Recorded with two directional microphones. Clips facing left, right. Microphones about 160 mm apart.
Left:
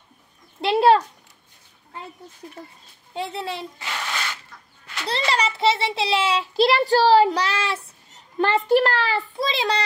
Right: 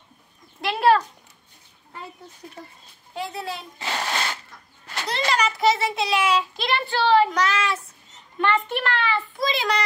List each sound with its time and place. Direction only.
0.6 s speech: 25° left (ahead or behind)
3.2 s a child's voice: 25° left (ahead or behind)
3.8 s a sound: 35° right (ahead or behind)
5.0 s child singing: 30° left (ahead or behind)